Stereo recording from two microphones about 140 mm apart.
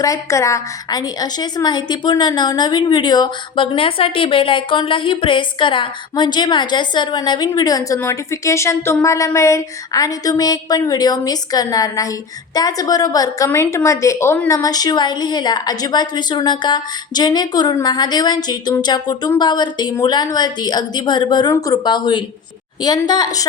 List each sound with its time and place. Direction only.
0.0 s a woman's voice: 20° left (ahead or behind)